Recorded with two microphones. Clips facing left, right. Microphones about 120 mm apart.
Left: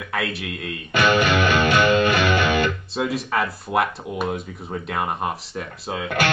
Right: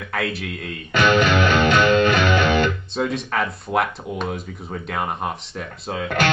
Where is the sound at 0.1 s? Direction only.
Centre (ahead or behind).